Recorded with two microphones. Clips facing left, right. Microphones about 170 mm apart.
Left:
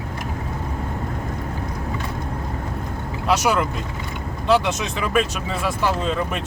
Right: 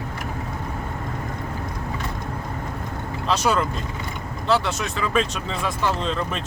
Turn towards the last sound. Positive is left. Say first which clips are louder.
# left 2 dB
turn(degrees=10)  # may be behind; listen again after turning